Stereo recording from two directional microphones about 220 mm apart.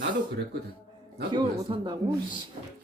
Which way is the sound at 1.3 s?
20° right (ahead or behind).